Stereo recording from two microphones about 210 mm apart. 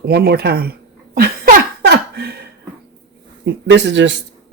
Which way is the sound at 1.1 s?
45° right (ahead or behind).